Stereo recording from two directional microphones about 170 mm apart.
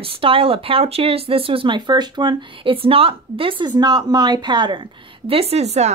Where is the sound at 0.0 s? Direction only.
35° right (ahead or behind).